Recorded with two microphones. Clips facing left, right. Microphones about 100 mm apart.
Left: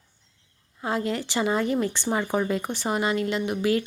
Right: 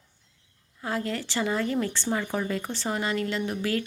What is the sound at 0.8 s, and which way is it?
Speech, 20° left (ahead or behind).